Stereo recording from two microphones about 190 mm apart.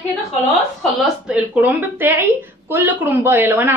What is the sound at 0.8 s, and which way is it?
A woman's voice, 5° right (ahead or behind).